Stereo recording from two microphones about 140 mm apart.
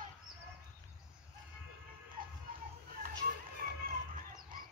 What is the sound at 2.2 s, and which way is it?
Music, 90° right.